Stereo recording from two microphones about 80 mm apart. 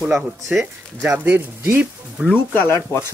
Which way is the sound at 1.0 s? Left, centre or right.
Centre.